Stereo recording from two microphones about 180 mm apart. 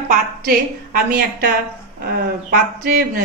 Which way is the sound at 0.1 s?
55° right (ahead or behind).